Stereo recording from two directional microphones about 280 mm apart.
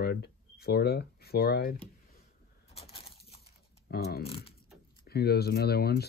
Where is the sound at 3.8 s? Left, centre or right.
Left.